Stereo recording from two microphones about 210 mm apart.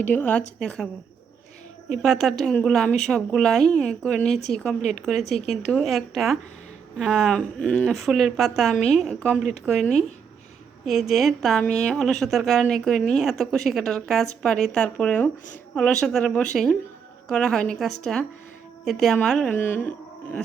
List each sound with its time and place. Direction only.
0.0 s a woman's voice: 10° left (ahead or behind)
2.0 s a woman's voice: centre (ahead or behind)
4.3 s speech: 30° left (ahead or behind)
4.9 s a woman's voice: centre (ahead or behind)
5.2 s speech: 30° left (ahead or behind)
5.7 s a woman's voice: centre (ahead or behind)
11.1 s a woman's voice: centre (ahead or behind)